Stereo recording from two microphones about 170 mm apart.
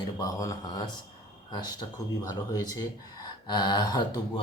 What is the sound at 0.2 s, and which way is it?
Speech, 20° left (ahead or behind).